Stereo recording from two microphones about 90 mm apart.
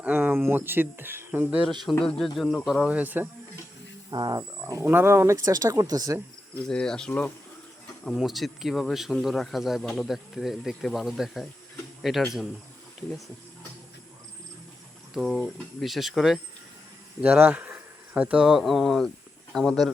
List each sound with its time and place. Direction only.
0.0 s speech: 20° right (ahead or behind)
1.7 s speech: centre (ahead or behind)
2.6 s speech: 5° right (ahead or behind)
2.9 s speech: 20° right (ahead or behind)
4.1 s speech: 50° right (ahead or behind)
4.6 s speech: 30° right (ahead or behind)
6.7 s speech: 10° left (ahead or behind)
8.0 s speech: centre (ahead or behind)
15.1 s speech: centre (ahead or behind)
17.2 s speech: 20° right (ahead or behind); by 19.9 s 5° left (ahead or behind)